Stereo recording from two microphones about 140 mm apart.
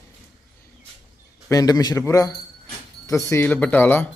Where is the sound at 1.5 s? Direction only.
25° left (ahead or behind).